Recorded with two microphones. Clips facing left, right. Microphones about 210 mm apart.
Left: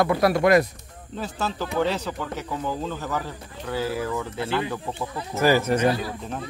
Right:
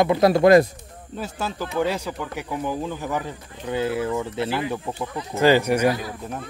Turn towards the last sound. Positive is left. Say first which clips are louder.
# right 1 dB
turn(degrees=-10)  # may be behind; listen again after turning